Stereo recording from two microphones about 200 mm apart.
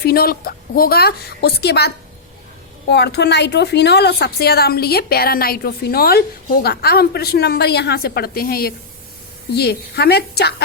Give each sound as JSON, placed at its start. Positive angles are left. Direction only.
{"t": 0.0, "sound": "a woman's voice", "side_deg": 50}
{"t": 2.9, "sound": "a woman's voice", "side_deg": 55}